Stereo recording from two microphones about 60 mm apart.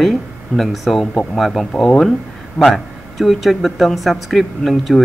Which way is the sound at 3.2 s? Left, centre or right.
Centre.